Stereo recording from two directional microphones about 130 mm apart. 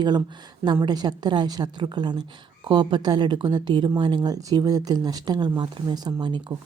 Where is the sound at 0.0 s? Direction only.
35° right (ahead or behind).